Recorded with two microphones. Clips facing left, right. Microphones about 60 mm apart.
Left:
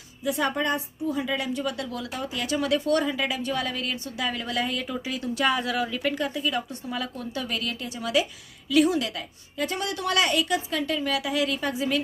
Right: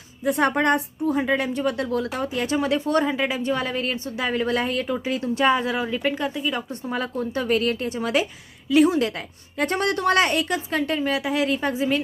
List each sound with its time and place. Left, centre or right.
0.3 s a woman's voice: right
1.1 s a woman's voice: right
9.6 s a woman's voice: right